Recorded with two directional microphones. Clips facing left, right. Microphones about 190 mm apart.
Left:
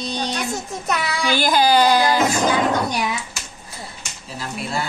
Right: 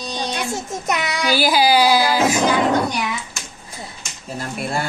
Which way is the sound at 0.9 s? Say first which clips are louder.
Right 1 dB; 15° right (ahead or behind).